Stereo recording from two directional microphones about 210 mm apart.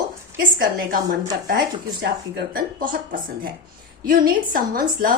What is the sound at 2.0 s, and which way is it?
A woman's voice, 45° right (ahead or behind).